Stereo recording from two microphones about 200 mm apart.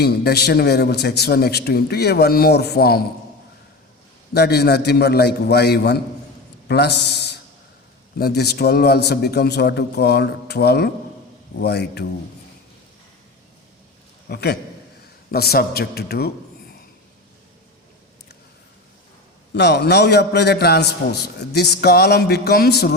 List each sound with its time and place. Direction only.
0.0 s a man's voice: 50° left (ahead or behind)
4.4 s a man's voice: 55° left (ahead or behind)
14.3 s a man's voice: 55° left (ahead or behind)
19.5 s a man's voice: 55° left (ahead or behind)